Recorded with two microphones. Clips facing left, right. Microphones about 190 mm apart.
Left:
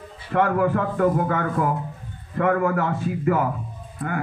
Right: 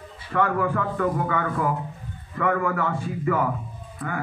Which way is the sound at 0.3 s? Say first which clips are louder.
Left 3 dB; 45° left (ahead or behind).